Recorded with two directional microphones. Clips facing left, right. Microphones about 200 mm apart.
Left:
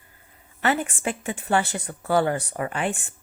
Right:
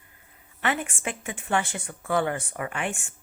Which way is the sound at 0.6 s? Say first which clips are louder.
Left 4 dB; 35° left (ahead or behind).